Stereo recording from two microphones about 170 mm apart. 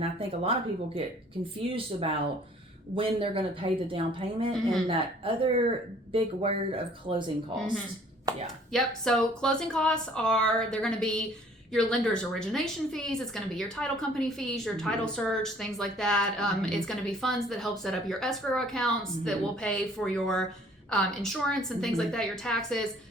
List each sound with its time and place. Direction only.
0.0 s speech: 35° right (ahead or behind)
1.7 s speech: 30° right (ahead or behind)
8.7 s a woman's voice: 5° left (ahead or behind)